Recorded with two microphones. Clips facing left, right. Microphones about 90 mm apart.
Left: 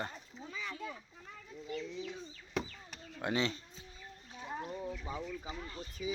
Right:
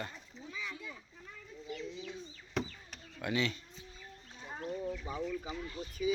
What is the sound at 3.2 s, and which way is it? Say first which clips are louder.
Speech: even; 30° left (ahead or behind).